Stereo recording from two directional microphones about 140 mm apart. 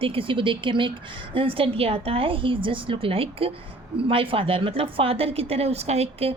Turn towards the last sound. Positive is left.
turn(degrees=-45)  # may be behind; listen again after turning